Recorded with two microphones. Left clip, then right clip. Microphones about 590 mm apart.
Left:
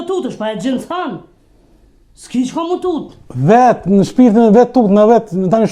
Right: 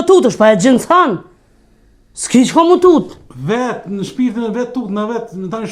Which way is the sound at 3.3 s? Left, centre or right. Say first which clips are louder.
Left 9 dB; left.